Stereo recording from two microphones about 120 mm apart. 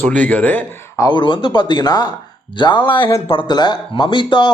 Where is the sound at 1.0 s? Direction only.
40° left (ahead or behind).